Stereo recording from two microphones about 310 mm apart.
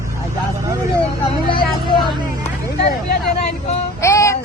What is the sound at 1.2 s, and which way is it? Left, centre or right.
Vehicle, centre.